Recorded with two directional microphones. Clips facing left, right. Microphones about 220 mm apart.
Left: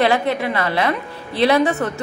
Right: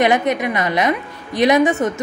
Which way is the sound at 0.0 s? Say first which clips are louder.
Right 1 dB; 20° right (ahead or behind).